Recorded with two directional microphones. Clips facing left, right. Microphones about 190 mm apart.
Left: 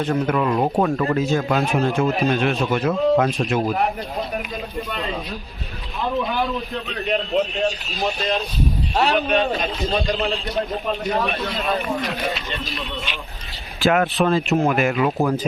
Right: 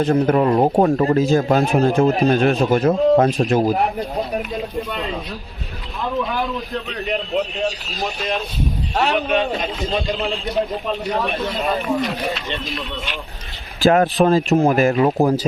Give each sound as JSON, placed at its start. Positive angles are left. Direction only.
{"t": 0.0, "sound": "speech", "side_deg": -35}
{"t": 6.9, "sound": "a man's voice", "side_deg": 0}
{"t": 9.1, "sound": "a man's voice", "side_deg": 0}
{"t": 13.8, "sound": "speech", "side_deg": -35}